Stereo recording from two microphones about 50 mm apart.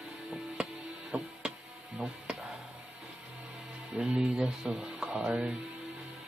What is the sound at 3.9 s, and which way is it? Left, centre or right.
Speech, centre.